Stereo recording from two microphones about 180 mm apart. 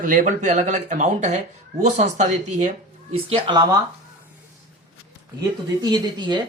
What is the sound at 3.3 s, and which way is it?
Speech, 25° right (ahead or behind).